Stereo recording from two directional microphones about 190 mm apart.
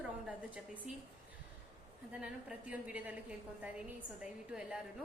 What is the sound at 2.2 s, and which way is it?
A woman's voice, 5° right (ahead or behind).